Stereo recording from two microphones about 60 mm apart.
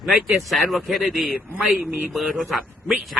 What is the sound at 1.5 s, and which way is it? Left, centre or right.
Speech, right.